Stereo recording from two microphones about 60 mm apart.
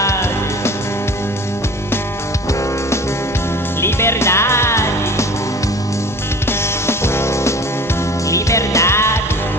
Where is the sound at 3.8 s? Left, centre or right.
Left.